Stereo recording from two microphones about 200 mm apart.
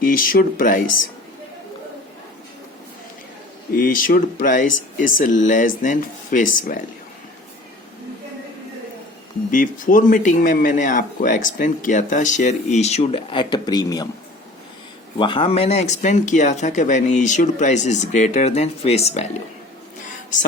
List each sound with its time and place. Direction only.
0.0 s speech: 45° left (ahead or behind)
3.7 s speech: 45° left (ahead or behind)
9.5 s speech: 40° left (ahead or behind); by 14.1 s 20° left (ahead or behind)
15.2 s speech: 25° left (ahead or behind)